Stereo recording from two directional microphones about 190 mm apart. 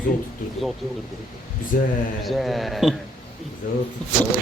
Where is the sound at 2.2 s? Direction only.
Centre (ahead or behind).